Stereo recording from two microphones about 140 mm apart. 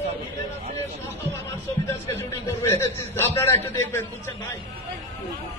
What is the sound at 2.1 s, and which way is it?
A man's voice, 15° left (ahead or behind).